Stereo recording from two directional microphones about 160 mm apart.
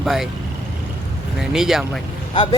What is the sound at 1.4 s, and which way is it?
Speech, 5° right (ahead or behind).